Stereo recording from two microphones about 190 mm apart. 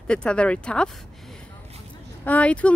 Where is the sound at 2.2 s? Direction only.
5° left (ahead or behind).